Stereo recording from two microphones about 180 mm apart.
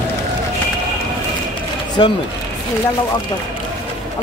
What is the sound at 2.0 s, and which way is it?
Speech, 25° left (ahead or behind).